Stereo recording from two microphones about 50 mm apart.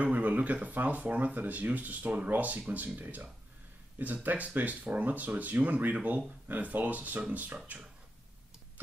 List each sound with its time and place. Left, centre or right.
0.0 s speech: right